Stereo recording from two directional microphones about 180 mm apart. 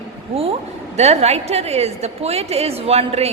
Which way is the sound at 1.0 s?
35° right (ahead or behind).